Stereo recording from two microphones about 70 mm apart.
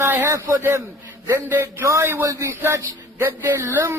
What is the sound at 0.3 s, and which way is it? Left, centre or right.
Speech, right.